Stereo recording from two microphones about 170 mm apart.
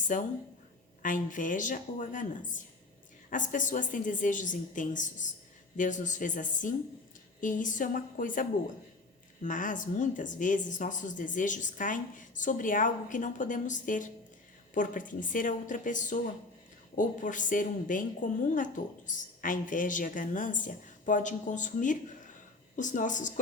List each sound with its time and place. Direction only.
0.1 s speech: 50° left (ahead or behind)